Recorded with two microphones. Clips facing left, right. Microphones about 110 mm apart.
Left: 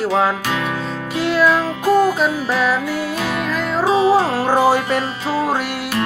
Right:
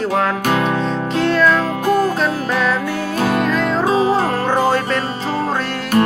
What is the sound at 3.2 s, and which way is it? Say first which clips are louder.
Music: right 5 dB; 40° right (ahead or behind).